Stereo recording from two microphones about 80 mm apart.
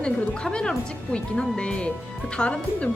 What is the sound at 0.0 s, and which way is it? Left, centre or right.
Speech, centre.